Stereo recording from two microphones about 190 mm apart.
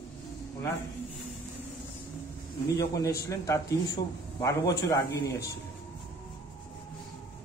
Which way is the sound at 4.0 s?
35° left (ahead or behind).